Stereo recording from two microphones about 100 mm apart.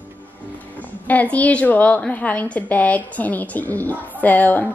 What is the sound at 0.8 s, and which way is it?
A woman's voice, 15° left (ahead or behind).